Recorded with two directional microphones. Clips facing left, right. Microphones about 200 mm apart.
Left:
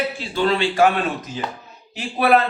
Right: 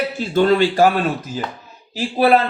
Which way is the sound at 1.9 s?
30° right (ahead or behind).